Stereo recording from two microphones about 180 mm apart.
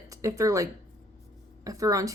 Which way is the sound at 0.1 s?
20° right (ahead or behind).